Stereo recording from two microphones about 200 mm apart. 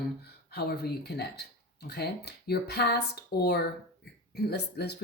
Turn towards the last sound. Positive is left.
turn(degrees=55)  # may be behind; listen again after turning